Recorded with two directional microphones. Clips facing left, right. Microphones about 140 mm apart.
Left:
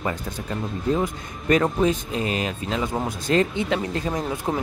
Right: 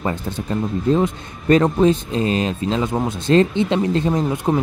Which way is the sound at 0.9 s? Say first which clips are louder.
Right 6 dB; 25° right (ahead or behind).